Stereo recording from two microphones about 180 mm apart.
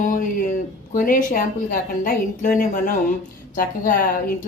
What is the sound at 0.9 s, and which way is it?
A woman's voice, 50° left (ahead or behind).